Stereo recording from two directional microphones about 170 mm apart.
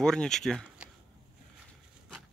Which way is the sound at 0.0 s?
5° left (ahead or behind).